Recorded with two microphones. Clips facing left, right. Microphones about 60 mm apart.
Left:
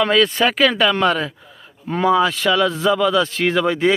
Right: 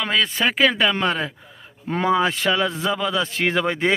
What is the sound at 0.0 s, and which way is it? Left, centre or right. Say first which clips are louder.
Speech: left 6 dB; centre.